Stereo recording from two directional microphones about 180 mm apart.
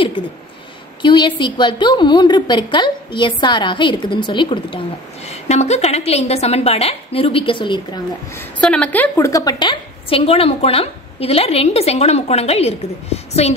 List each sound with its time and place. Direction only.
0.2 s a woman's voice: 30° left (ahead or behind)
8.4 s a woman's voice: 5° left (ahead or behind); by 13.6 s 35° left (ahead or behind)